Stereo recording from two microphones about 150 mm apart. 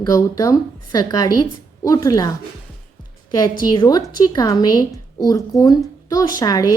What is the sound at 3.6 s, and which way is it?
A woman's voice, 30° left (ahead or behind).